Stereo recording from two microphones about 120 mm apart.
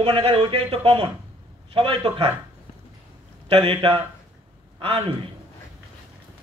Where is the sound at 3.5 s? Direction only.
45° right (ahead or behind).